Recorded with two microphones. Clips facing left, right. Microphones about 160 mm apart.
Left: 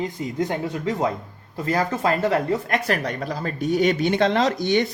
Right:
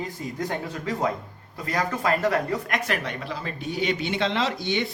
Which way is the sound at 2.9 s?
40° left (ahead or behind).